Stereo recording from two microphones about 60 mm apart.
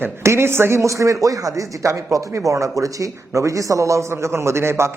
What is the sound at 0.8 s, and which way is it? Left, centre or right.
Speech, right.